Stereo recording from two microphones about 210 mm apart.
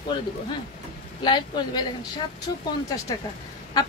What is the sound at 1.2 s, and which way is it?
Speech, 20° left (ahead or behind).